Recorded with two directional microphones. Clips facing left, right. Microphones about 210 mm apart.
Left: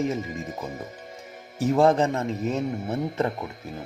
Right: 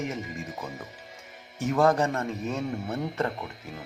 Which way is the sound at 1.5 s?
30° left (ahead or behind).